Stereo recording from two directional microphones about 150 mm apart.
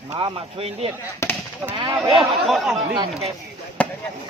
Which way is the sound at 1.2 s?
20° left (ahead or behind).